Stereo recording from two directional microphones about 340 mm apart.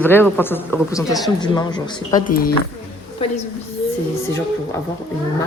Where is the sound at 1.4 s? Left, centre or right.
Centre.